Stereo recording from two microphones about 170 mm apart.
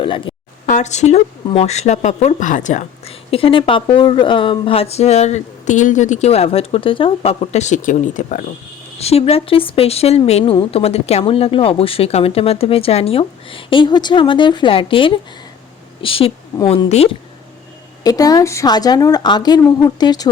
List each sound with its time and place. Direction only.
0.0 s speech: 30° left (ahead or behind)
0.7 s speech: 45° left (ahead or behind)
3.3 s speech: 30° left (ahead or behind); by 8.4 s 50° left (ahead or behind)
9.0 s a woman's voice: 35° left (ahead or behind)
18.0 s a woman's voice: 20° left (ahead or behind)